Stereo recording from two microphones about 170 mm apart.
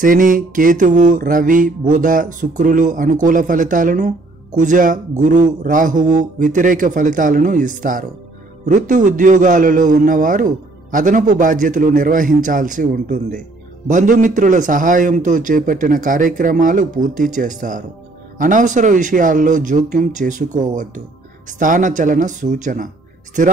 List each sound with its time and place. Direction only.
0.0 s a man's voice: 50° right (ahead or behind)